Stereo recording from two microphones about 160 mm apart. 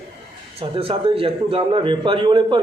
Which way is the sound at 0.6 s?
35° right (ahead or behind).